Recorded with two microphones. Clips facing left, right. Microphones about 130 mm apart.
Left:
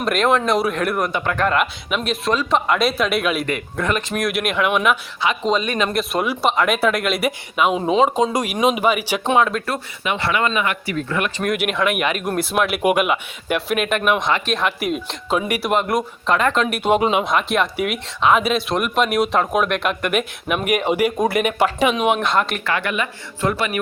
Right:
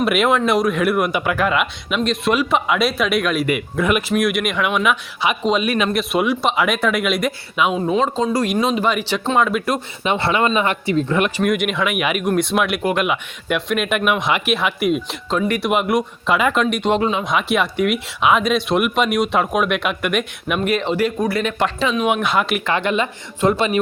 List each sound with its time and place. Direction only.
0.0 s a man's voice: 5° right (ahead or behind); by 9.4 s 10° left (ahead or behind)
9.4 s a man's voice: 5° right (ahead or behind)
10.0 s speech: 25° right (ahead or behind)
11.5 s a man's voice: centre (ahead or behind)
13.1 s a man's voice: centre (ahead or behind)
15.4 s speech: 10° left (ahead or behind)
15.7 s a man's voice: 5° right (ahead or behind); by 17.2 s 15° left (ahead or behind)
17.2 s a man's voice: centre (ahead or behind)
20.7 s speech: 15° left (ahead or behind)
22.1 s a man's voice: 5° right (ahead or behind)
22.6 s speech: 25° right (ahead or behind)